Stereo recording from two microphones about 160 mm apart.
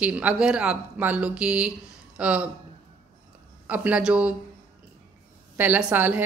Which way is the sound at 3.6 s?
10° right (ahead or behind).